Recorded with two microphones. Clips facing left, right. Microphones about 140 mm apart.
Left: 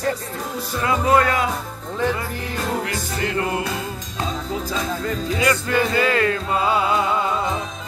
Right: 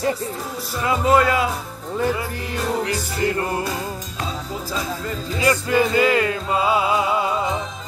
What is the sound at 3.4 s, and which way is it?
Speech, 35° right (ahead or behind).